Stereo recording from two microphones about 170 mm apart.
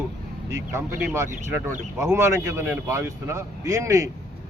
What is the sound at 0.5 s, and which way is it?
A man's voice, 15° right (ahead or behind).